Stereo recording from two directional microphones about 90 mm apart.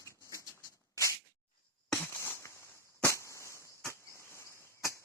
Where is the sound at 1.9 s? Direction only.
30° left (ahead or behind).